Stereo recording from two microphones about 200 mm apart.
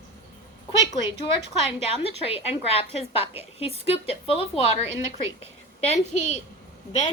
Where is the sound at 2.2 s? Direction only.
30° left (ahead or behind).